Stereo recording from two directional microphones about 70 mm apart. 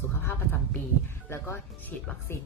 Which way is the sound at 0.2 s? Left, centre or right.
Left.